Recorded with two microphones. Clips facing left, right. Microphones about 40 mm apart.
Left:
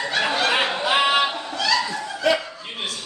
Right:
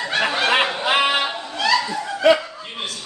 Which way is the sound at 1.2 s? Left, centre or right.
Right.